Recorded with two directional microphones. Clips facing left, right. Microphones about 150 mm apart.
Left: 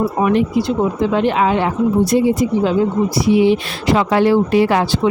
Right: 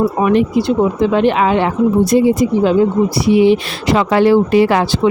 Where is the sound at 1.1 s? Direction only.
75° right (ahead or behind).